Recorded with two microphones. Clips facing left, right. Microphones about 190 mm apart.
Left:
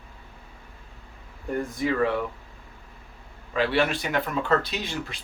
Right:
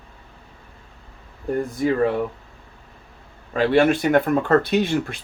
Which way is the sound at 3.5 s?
45° right (ahead or behind).